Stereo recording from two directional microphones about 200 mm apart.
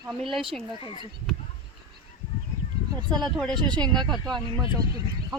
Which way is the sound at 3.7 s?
5° left (ahead or behind).